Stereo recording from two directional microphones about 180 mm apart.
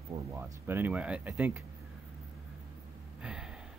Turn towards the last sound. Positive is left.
turn(degrees=-5)  # may be behind; listen again after turning